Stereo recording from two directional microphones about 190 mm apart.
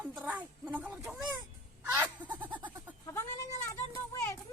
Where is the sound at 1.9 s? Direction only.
10° right (ahead or behind).